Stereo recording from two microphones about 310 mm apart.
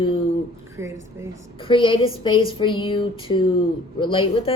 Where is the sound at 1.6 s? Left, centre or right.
Centre.